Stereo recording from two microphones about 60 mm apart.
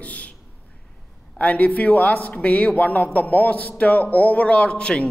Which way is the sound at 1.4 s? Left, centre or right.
Left.